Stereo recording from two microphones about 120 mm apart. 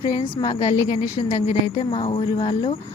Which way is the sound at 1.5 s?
55° left (ahead or behind).